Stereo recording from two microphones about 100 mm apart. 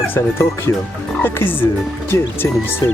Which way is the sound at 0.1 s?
25° left (ahead or behind).